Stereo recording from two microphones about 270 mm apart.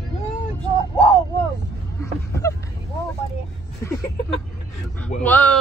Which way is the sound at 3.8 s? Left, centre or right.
Centre.